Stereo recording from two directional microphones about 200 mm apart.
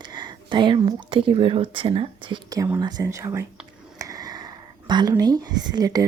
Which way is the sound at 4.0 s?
20° right (ahead or behind).